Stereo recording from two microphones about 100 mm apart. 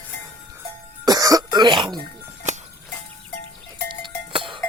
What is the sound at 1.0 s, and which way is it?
Throat clearing, 40° right (ahead or behind).